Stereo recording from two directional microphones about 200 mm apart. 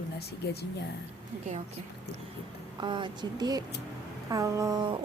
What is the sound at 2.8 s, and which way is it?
A woman's voice, 25° right (ahead or behind).